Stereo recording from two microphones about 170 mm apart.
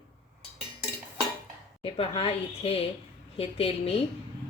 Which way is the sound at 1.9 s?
35° left (ahead or behind).